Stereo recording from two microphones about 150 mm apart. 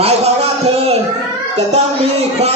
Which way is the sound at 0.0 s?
45° right (ahead or behind).